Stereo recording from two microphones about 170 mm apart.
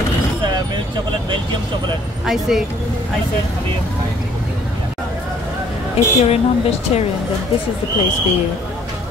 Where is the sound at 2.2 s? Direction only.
Centre (ahead or behind).